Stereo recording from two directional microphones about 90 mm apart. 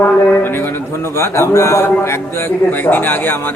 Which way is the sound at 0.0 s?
25° left (ahead or behind).